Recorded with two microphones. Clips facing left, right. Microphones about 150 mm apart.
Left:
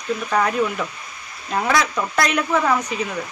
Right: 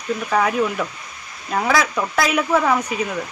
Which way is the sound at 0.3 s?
Centre (ahead or behind).